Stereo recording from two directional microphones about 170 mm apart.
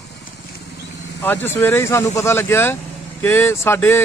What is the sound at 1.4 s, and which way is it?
A man's voice, 15° left (ahead or behind).